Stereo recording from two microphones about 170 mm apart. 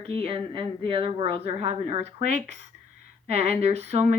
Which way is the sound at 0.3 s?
30° right (ahead or behind).